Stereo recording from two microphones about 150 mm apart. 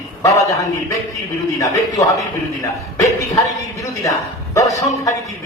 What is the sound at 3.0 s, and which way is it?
A woman's voice, 20° left (ahead or behind).